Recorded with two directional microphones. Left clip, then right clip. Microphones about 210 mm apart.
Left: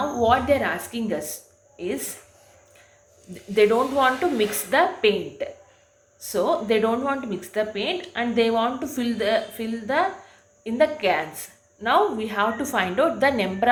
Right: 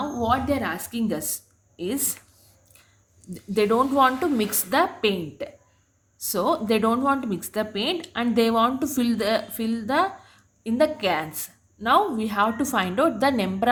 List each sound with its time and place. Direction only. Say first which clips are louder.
0.2 s speech: left 4 dB; 35° right (ahead or behind)
3.5 s speech: left 2 dB; 35° right (ahead or behind)